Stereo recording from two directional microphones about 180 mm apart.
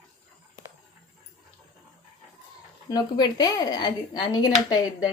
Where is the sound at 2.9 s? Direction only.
20° left (ahead or behind).